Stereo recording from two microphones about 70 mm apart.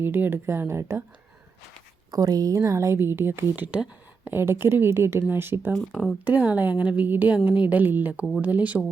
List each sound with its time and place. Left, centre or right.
0.0 s a woman's voice: right
2.0 s speech: right
2.6 s a woman's voice: right
3.5 s a woman's voice: right
4.3 s a woman's voice: right
5.9 s speech: centre
6.2 s a woman's voice: right